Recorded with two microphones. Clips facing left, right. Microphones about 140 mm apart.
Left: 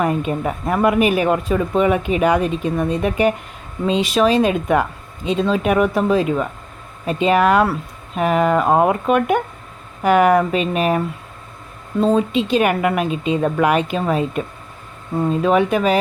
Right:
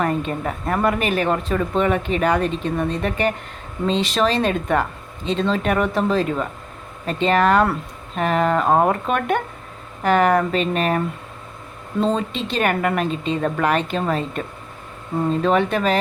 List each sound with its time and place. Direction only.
0.0 s speech: 10° left (ahead or behind)